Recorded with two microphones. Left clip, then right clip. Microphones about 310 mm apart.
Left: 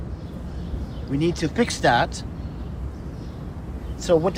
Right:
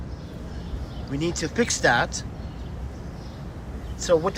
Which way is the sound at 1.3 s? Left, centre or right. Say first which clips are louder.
Left 1 dB; centre.